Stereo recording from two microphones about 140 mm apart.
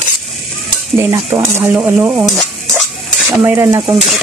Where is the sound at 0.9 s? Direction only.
20° right (ahead or behind).